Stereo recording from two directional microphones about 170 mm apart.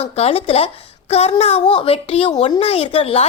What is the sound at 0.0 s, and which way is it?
A woman's voice, 35° left (ahead or behind).